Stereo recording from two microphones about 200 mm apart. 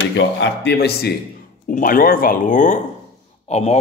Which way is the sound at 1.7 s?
45° left (ahead or behind).